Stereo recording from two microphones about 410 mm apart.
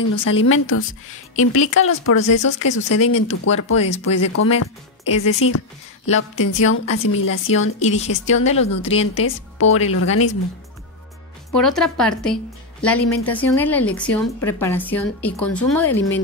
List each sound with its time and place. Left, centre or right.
0.2 s speech: left
7.8 s speech: centre
9.0 s speech: left
11.5 s a woman's voice: centre